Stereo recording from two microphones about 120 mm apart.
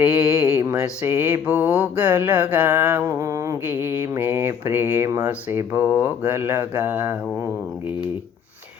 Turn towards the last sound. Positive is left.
turn(degrees=-20)  # may be behind; listen again after turning